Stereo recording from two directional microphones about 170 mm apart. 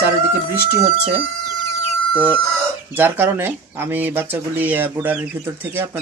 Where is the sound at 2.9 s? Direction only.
15° right (ahead or behind).